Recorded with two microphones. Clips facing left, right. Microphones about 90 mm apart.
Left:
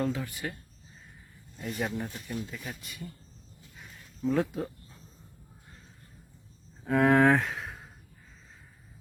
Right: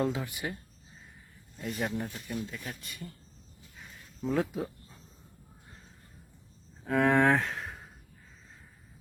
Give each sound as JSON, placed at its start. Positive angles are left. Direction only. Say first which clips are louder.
{"t": 0.0, "sound": "speech", "louder": "even", "side_deg": -15}
{"t": 1.5, "sound": "speech", "louder": "even", "side_deg": 0}
{"t": 4.3, "sound": "speech", "louder": "left 2 dB", "side_deg": 0}
{"t": 6.8, "sound": "speech", "louder": "left 2 dB", "side_deg": 0}